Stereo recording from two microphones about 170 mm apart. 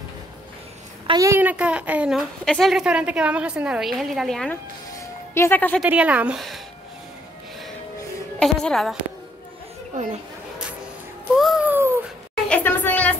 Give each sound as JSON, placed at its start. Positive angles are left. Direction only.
{"t": 1.0, "sound": "a woman's voice", "side_deg": -20}
{"t": 4.9, "sound": "music", "side_deg": 15}
{"t": 5.8, "sound": "a woman's voice", "side_deg": -5}
{"t": 8.4, "sound": "a woman's voice", "side_deg": 5}
{"t": 9.9, "sound": "speech", "side_deg": -45}
{"t": 11.3, "sound": "babbling", "side_deg": 0}
{"t": 12.4, "sound": "a sound", "side_deg": 10}